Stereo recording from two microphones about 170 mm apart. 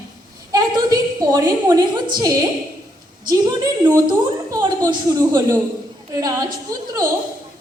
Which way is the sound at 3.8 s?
20° right (ahead or behind).